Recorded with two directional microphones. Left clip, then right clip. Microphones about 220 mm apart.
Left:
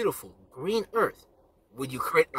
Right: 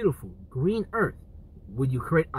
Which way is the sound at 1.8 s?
20° left (ahead or behind).